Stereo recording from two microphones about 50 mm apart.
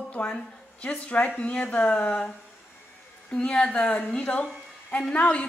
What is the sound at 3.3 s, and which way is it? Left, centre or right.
Speech, centre.